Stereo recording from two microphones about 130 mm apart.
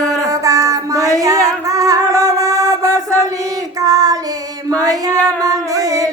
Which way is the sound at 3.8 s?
25° right (ahead or behind).